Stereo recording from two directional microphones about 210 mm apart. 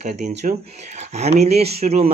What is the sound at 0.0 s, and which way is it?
Speech, 30° right (ahead or behind).